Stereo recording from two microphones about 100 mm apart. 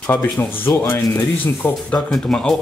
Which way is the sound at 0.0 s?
20° left (ahead or behind).